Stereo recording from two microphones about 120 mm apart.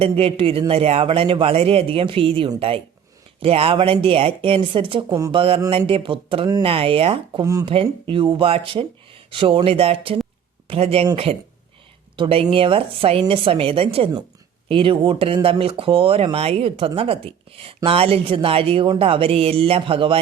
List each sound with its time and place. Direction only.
0.0 s speech: 50° right (ahead or behind)
5.0 s speech: 30° right (ahead or behind)
5.3 s speech: 50° right (ahead or behind)
12.1 s speech: 50° right (ahead or behind)